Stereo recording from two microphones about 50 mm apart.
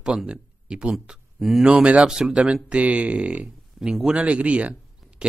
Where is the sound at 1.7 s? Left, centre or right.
Right.